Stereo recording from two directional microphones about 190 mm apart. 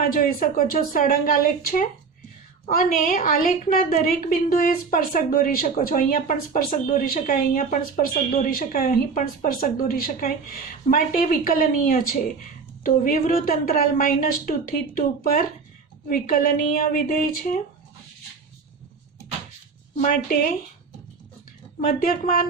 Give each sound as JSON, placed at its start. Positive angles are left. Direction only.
{"t": 0.0, "sound": "a woman's voice", "side_deg": 50}
{"t": 21.8, "sound": "a woman's voice", "side_deg": 50}